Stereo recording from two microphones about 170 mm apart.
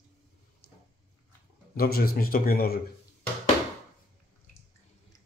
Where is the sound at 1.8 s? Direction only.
60° left (ahead or behind).